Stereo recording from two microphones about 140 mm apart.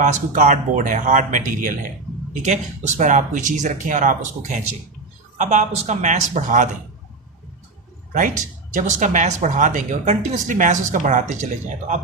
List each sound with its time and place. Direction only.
0.0 s speech: 65° right (ahead or behind)
2.3 s speech: 60° right (ahead or behind)
8.1 s speech: 65° right (ahead or behind)